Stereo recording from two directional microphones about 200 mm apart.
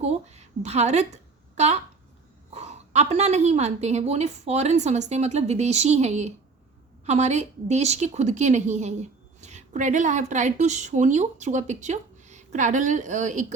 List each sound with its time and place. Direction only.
0.0 s a woman's voice: 35° right (ahead or behind)